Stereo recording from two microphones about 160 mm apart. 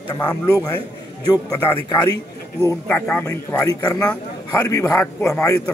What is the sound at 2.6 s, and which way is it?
A man's voice, 10° left (ahead or behind).